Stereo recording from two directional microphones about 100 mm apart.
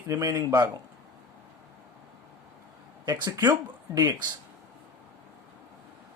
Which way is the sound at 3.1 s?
45° right (ahead or behind).